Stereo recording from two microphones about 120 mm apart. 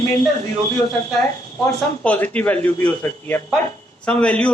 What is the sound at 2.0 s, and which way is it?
A man's voice, 10° left (ahead or behind).